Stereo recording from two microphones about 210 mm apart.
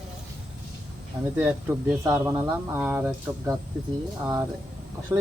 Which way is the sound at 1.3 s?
10° right (ahead or behind).